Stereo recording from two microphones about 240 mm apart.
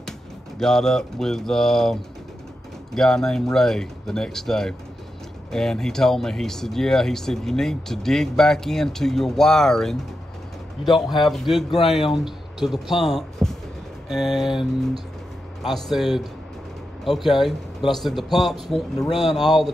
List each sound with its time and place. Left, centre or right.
0.6 s speech: centre